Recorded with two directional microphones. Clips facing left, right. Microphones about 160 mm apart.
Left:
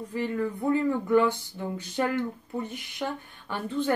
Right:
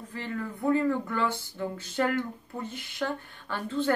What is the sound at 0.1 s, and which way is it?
Speech, 15° left (ahead or behind).